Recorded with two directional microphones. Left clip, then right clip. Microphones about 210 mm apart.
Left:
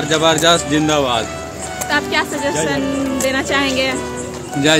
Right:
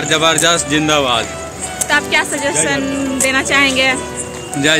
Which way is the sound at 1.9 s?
15° right (ahead or behind).